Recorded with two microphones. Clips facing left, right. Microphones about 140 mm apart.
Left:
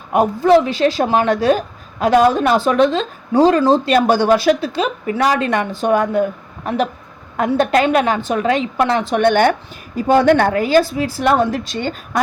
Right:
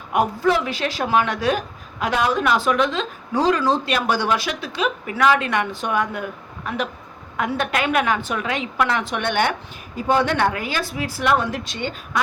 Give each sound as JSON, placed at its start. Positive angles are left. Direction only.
{"t": 0.1, "sound": "speech", "side_deg": 30}
{"t": 7.3, "sound": "speech", "side_deg": 35}